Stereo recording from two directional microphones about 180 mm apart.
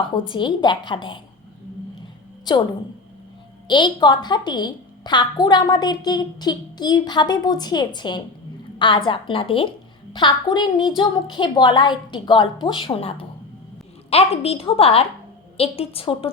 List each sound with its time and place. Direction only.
0.1 s a woman's voice: 25° left (ahead or behind)
2.4 s a woman's voice: 25° left (ahead or behind)
3.7 s a woman's voice: 25° left (ahead or behind)